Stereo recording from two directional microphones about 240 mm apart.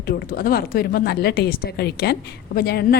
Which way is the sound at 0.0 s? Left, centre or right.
Left.